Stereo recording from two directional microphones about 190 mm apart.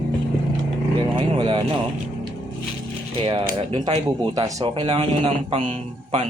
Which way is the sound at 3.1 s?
30° right (ahead or behind).